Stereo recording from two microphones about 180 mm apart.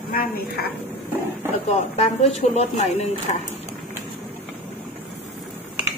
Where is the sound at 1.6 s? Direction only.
35° left (ahead or behind).